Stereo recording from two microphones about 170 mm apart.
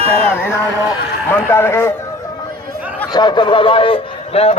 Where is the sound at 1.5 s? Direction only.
15° left (ahead or behind).